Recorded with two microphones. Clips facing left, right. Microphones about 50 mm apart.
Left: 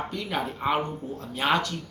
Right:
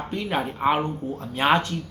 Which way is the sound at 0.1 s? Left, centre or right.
Right.